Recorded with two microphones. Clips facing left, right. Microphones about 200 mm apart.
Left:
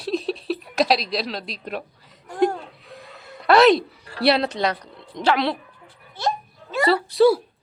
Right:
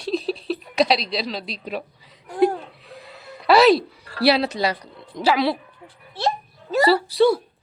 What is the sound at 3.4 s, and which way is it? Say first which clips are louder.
Speech: even; 5° right (ahead or behind).